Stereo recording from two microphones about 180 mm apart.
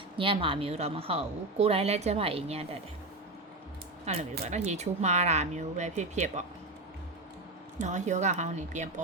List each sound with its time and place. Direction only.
0.2 s a woman's voice: 30° right (ahead or behind)
4.0 s a woman's voice: 40° right (ahead or behind)
7.8 s a woman's voice: 40° right (ahead or behind)